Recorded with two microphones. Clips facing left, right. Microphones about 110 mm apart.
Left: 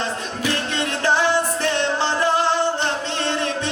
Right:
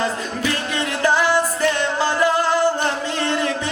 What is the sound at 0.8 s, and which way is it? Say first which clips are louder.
Music: right 2 dB; 25° left (ahead or behind).